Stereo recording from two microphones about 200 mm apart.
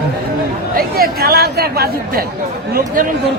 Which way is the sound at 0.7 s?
50° right (ahead or behind).